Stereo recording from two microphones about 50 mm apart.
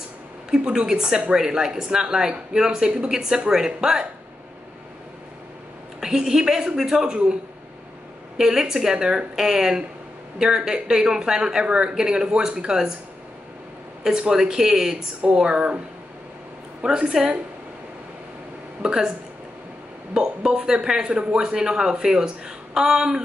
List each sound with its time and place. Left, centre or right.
0.5 s speech: centre
5.9 s speech: centre
8.4 s speech: centre
14.0 s speech: centre
16.8 s speech: centre
18.8 s speech: centre
20.2 s speech: centre